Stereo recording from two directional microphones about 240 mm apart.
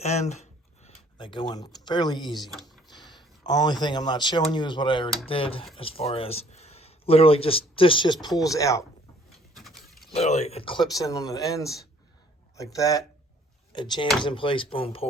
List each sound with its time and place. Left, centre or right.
0.0 s speech: left
2.4 s a sound: centre
3.1 s speech: centre
9.6 s mechanisms: centre
10.1 s speech: left